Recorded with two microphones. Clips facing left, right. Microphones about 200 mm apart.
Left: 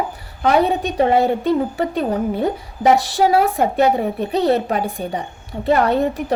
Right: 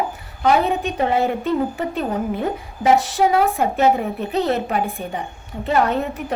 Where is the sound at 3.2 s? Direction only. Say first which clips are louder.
Left 2 dB; 35° left (ahead or behind).